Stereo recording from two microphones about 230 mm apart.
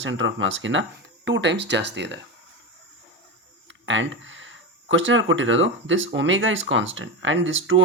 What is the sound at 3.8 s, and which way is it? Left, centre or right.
Speech, right.